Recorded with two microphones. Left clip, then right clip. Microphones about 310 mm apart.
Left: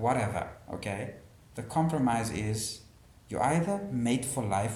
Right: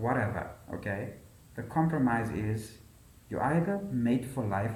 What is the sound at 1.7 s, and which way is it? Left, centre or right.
Speech, left.